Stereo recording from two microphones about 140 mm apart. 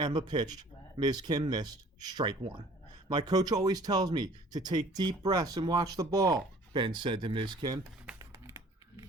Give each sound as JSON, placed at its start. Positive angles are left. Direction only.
{"t": 0.0, "sound": "speech", "side_deg": -30}
{"t": 8.2, "sound": "typing", "side_deg": -20}